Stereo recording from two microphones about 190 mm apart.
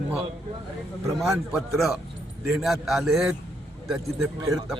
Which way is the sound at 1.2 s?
Centre (ahead or behind).